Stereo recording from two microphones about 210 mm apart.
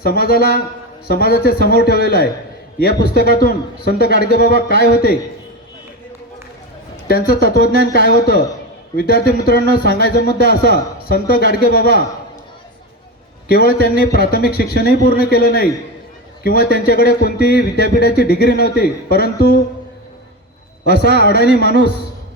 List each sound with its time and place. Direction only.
0.0 s a man's voice: 45° left (ahead or behind)
6.9 s a man's voice: 45° left (ahead or behind)
13.5 s a man's voice: 45° left (ahead or behind)
20.8 s a man's voice: 50° left (ahead or behind)